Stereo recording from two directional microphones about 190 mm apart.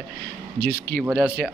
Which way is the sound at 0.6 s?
55° right (ahead or behind).